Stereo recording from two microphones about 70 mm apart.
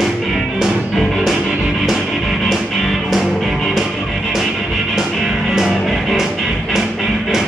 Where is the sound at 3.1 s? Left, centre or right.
Centre.